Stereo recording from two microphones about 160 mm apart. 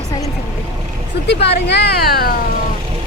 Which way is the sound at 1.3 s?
90° left.